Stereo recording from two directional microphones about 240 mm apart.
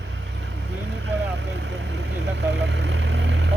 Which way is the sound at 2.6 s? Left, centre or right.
Right.